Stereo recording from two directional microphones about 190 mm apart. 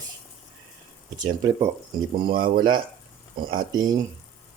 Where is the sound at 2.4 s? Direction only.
25° right (ahead or behind).